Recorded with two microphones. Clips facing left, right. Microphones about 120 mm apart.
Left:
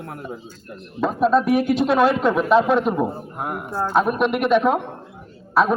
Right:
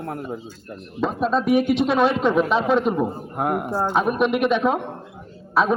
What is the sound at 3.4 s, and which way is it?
Speech, 60° right (ahead or behind).